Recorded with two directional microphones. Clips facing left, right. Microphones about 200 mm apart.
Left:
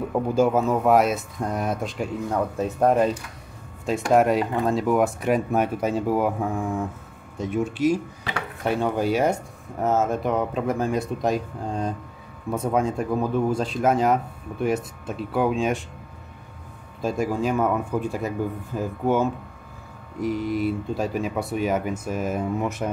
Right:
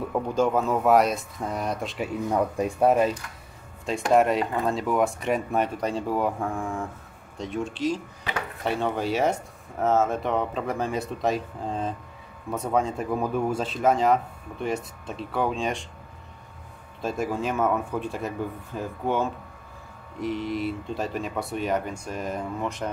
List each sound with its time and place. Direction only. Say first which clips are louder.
0.1 s speech: left 3 dB; 10° left (ahead or behind)
17.0 s speech: left 3 dB; centre (ahead or behind)